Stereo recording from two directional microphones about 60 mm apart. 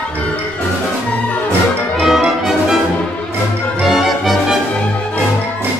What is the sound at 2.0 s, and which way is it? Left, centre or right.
Music, centre.